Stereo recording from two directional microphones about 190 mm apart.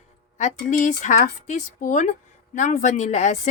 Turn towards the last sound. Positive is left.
turn(degrees=35)  # may be behind; listen again after turning